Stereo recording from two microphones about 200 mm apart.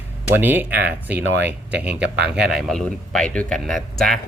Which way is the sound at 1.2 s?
60° right (ahead or behind).